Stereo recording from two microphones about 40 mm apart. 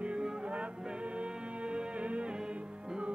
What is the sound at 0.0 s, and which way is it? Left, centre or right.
Music, right.